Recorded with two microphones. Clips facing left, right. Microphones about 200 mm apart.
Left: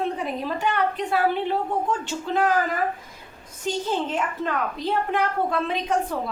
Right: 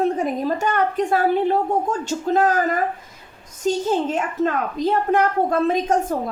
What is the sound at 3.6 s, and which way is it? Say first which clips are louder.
Speech: right 6 dB; 45° right (ahead or behind).